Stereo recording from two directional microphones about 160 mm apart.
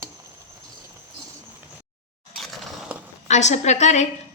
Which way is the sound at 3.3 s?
45° left (ahead or behind).